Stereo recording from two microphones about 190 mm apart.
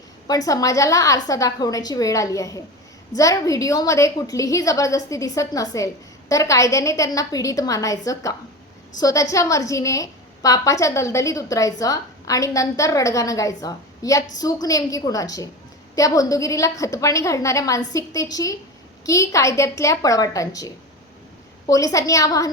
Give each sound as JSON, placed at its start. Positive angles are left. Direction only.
{"t": 0.3, "sound": "a woman's voice", "side_deg": 20}
{"t": 21.7, "sound": "a woman's voice", "side_deg": 20}